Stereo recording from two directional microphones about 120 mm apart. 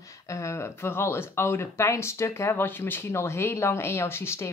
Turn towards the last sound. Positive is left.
turn(degrees=20)  # may be behind; listen again after turning